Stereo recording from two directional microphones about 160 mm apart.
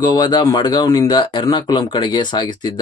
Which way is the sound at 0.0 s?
25° left (ahead or behind).